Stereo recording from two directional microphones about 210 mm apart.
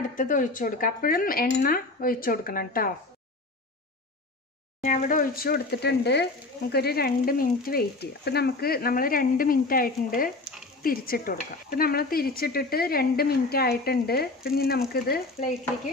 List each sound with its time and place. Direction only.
0.2 s stir: 40° left (ahead or behind)
4.8 s stir: 35° left (ahead or behind)